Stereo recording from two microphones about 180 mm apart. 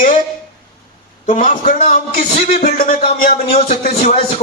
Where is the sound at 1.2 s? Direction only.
45° left (ahead or behind).